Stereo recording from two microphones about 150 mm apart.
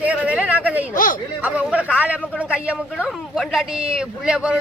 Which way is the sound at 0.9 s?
65° left (ahead or behind).